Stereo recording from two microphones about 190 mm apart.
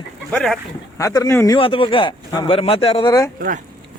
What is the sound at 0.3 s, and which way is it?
Speech, 5° left (ahead or behind).